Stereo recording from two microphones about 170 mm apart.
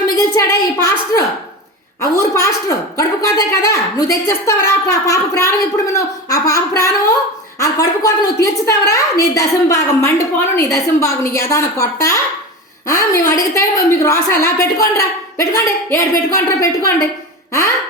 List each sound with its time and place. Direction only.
0.3 s a woman's voice: 20° left (ahead or behind)